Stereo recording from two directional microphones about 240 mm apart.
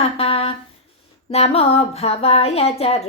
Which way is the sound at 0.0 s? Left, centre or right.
Left.